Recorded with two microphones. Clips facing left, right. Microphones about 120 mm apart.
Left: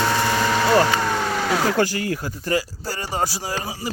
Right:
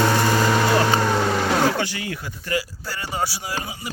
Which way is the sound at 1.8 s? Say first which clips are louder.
Left 6 dB; 40° left (ahead or behind).